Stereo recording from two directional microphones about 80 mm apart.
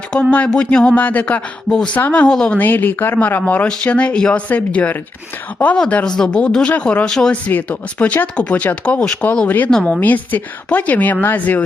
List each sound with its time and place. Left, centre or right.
0.1 s speech: centre
2.6 s speech: left
10.0 s speech: left